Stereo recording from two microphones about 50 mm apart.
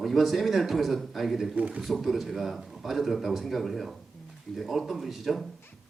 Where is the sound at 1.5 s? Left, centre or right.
Right.